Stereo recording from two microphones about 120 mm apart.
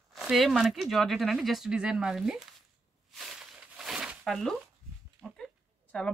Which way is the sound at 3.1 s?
Centre (ahead or behind).